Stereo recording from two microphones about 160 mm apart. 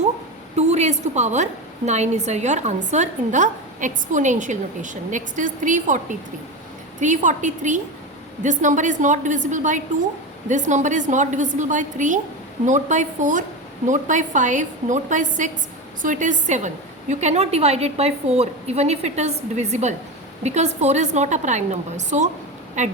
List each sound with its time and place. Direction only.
0.5 s a woman's voice: 45° right (ahead or behind)